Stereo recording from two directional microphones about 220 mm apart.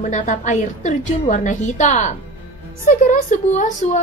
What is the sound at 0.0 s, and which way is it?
Speech, 35° left (ahead or behind).